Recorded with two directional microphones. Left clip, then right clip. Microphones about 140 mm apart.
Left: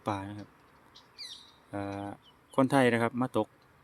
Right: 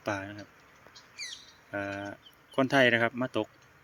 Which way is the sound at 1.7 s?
30° left (ahead or behind).